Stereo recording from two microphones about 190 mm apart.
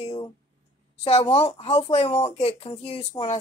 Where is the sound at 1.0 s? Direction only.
30° left (ahead or behind).